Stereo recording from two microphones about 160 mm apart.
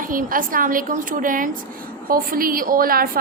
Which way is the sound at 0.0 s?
60° right (ahead or behind).